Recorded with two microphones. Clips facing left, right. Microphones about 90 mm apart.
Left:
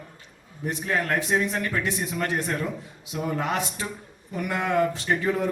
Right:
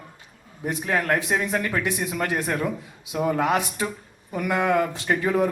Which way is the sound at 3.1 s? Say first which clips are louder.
Right 5 dB; 20° right (ahead or behind).